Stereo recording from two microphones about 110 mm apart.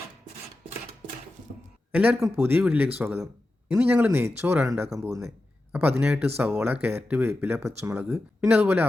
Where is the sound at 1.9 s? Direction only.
10° right (ahead or behind); by 5.2 s 30° right (ahead or behind).